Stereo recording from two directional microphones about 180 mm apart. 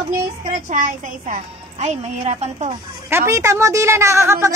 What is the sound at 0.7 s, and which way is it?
A woman's voice, 45° right (ahead or behind).